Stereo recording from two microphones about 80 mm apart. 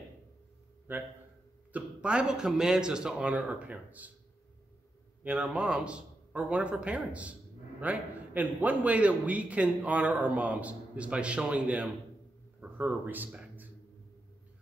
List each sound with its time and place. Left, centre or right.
0.9 s a man's voice: right
5.2 s a man's voice: centre
13.0 s speech: right